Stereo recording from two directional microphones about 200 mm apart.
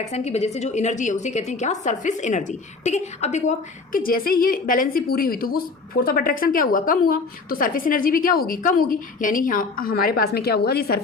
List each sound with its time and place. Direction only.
0.1 s a woman's voice: 35° left (ahead or behind)
3.9 s a woman's voice: 45° left (ahead or behind)